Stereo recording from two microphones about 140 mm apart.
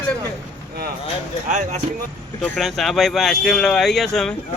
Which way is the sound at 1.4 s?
65° right (ahead or behind).